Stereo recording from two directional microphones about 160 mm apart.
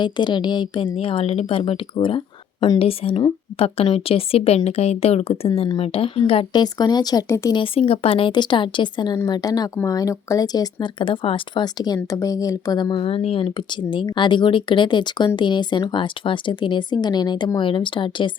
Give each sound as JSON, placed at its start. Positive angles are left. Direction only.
{"t": 0.0, "sound": "speech", "side_deg": 30}
{"t": 7.5, "sound": "speech", "side_deg": 35}